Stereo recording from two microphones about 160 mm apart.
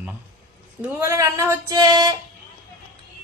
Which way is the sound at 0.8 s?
20° right (ahead or behind).